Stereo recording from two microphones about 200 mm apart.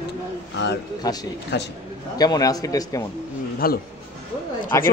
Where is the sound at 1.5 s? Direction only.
55° left (ahead or behind).